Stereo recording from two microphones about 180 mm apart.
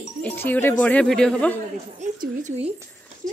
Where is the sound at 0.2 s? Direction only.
10° left (ahead or behind).